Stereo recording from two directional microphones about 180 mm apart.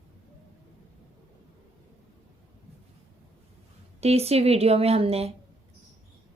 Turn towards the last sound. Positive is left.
turn(degrees=-35)  # may be behind; listen again after turning